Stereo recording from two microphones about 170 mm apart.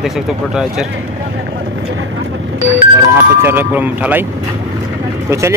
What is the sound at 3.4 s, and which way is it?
Speech, 10° right (ahead or behind).